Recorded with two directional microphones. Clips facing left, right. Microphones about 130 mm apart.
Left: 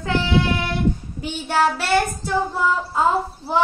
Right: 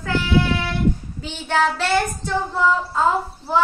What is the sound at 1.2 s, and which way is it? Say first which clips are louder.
Child singing: left 1 dB; 10° left (ahead or behind).